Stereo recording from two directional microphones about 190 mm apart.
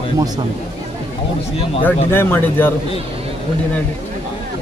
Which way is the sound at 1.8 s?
10° left (ahead or behind).